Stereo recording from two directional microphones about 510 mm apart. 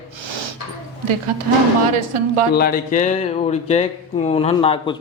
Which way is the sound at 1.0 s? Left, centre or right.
Right.